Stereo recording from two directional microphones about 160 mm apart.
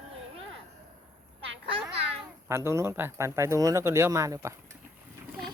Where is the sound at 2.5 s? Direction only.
15° right (ahead or behind).